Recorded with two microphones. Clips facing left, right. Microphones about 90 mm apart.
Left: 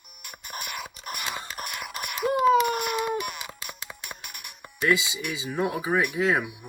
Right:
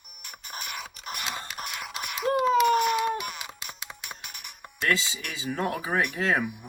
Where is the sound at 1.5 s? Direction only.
55° left (ahead or behind).